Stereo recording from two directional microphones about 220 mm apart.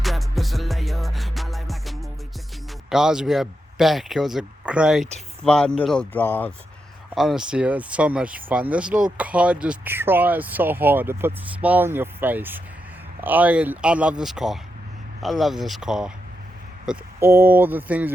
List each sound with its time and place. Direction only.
0.0 s music: centre (ahead or behind)
2.9 s speech: 5° right (ahead or behind)
5.0 s speech: 30° right (ahead or behind)
5.5 s speech: 5° left (ahead or behind)